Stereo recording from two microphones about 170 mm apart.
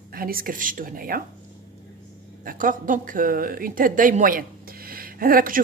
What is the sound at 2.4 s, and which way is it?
Speech, 55° right (ahead or behind).